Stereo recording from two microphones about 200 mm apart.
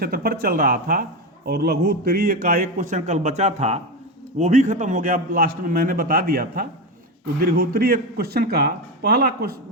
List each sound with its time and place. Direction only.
0.0 s a man's voice: 50° right (ahead or behind)